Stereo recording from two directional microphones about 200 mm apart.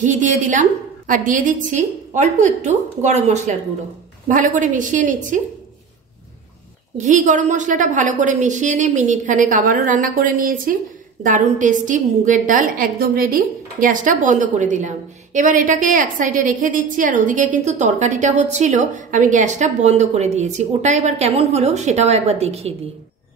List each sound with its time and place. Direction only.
0.0 s a woman's voice: 40° right (ahead or behind)
7.1 s a woman's voice: 35° right (ahead or behind)